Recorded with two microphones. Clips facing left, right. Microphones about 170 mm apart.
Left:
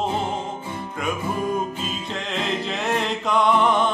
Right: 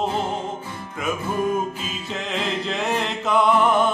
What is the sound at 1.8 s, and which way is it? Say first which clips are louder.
Music: left 1 dB; centre (ahead or behind).